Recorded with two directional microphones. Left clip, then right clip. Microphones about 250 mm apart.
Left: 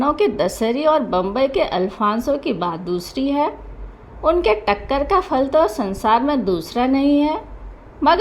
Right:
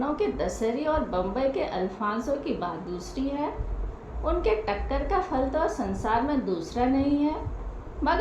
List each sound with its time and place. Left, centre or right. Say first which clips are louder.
0.0 s a woman's voice: left 10 dB; left